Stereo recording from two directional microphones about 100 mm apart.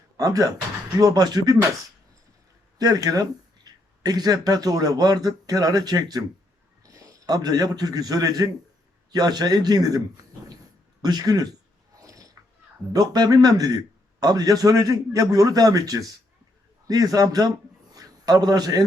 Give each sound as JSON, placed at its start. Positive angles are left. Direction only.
{"t": 0.2, "sound": "a man's voice", "side_deg": -35}
{"t": 2.7, "sound": "a man's voice", "side_deg": -40}
{"t": 11.9, "sound": "mechanisms", "side_deg": -35}
{"t": 12.9, "sound": "a man's voice", "side_deg": -40}